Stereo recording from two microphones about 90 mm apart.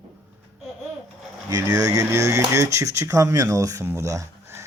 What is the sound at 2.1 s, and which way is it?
Speech, 35° right (ahead or behind).